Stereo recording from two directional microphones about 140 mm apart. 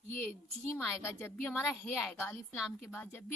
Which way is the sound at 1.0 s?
15° left (ahead or behind).